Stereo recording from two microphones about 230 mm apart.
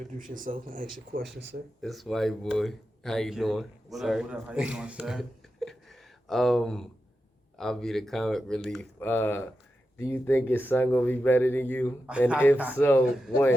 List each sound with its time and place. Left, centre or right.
0.2 s speech: right
1.8 s a man's voice: centre